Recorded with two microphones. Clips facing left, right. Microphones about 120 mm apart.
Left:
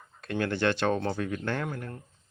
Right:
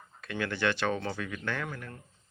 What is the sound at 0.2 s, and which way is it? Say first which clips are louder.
Speech: left 4 dB; 35° left (ahead or behind).